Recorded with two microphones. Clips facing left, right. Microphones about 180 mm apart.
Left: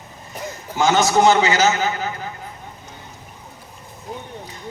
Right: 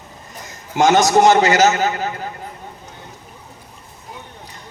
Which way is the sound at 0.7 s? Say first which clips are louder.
Right 4 dB; 45° right (ahead or behind).